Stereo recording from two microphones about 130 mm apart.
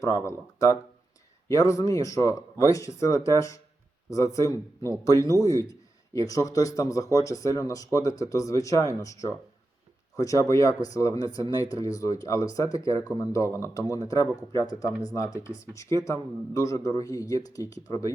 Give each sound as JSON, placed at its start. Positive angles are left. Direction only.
{"t": 0.0, "sound": "speech", "side_deg": 25}